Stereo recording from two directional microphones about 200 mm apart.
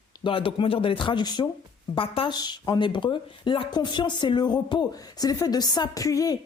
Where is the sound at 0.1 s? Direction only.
25° left (ahead or behind).